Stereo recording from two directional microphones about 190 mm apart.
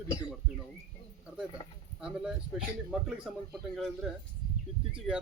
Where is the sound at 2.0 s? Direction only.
5° right (ahead or behind).